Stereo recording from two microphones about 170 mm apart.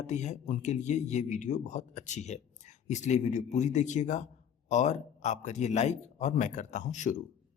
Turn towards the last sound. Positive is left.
turn(degrees=45)  # may be behind; listen again after turning